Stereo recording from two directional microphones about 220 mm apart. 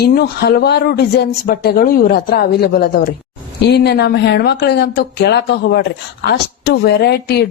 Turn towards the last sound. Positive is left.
turn(degrees=45)  # may be behind; listen again after turning